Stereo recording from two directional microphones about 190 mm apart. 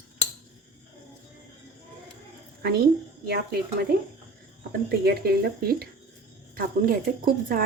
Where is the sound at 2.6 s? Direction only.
55° right (ahead or behind).